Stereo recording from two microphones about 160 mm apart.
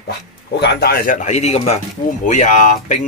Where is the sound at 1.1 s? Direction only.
45° left (ahead or behind).